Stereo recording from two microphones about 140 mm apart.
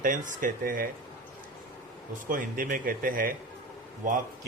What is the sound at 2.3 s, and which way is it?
Speech, 80° right.